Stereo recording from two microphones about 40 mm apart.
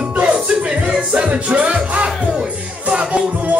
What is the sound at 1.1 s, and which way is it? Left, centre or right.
Music, right.